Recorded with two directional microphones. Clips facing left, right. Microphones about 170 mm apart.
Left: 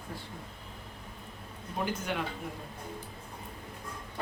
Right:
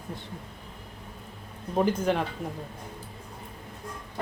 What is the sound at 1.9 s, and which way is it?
Speech, 35° right (ahead or behind).